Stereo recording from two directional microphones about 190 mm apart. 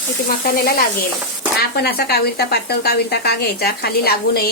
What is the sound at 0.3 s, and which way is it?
Sizzle, 50° left (ahead or behind).